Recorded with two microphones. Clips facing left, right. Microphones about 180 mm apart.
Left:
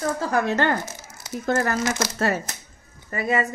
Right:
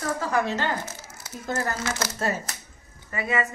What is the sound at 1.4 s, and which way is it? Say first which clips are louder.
Speech: left 6 dB; 80° left.